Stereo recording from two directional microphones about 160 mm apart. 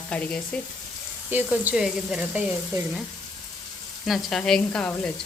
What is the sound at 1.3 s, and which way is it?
Speech, 10° right (ahead or behind).